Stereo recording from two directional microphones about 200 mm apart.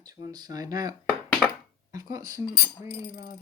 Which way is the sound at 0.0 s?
20° right (ahead or behind).